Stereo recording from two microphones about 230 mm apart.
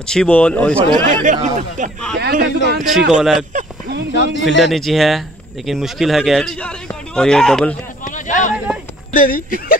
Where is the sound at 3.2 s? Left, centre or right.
Centre.